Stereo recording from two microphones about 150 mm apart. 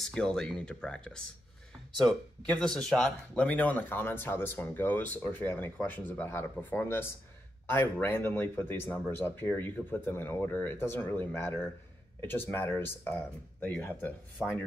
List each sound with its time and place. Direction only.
0.0 s speech: 5° left (ahead or behind)
2.6 s speech: 5° left (ahead or behind)